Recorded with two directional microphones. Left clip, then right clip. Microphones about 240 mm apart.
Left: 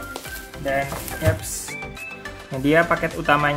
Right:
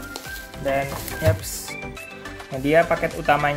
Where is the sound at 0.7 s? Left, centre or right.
Right.